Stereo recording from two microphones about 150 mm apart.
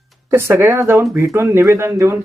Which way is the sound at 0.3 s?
15° right (ahead or behind).